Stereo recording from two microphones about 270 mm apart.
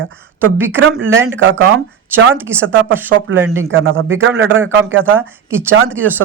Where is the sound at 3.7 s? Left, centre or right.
Right.